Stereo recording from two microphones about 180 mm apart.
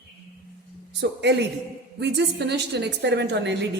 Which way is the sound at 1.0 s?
70° right (ahead or behind).